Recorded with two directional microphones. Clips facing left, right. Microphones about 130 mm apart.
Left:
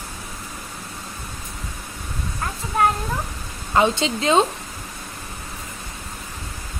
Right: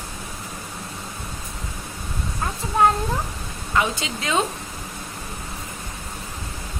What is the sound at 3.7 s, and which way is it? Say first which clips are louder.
Speech: left 5 dB; 30° left (ahead or behind).